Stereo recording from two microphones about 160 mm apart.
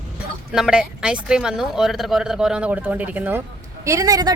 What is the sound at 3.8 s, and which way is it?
Speech, 20° right (ahead or behind).